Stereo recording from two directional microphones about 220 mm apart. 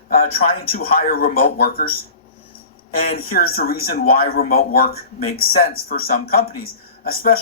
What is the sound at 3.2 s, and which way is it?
A man's voice, 40° left (ahead or behind).